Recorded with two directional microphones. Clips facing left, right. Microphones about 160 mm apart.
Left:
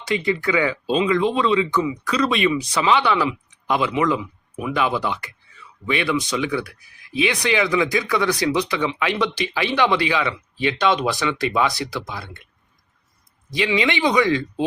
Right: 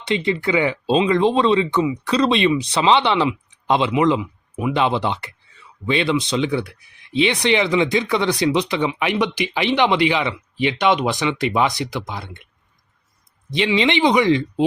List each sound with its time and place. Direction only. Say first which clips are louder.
0.0 s speech: right 1 dB; 25° right (ahead or behind)
13.5 s speech: right 3 dB; 25° right (ahead or behind)